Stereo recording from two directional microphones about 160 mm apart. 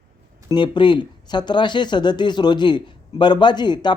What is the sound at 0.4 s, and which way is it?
Speech, 30° left (ahead or behind).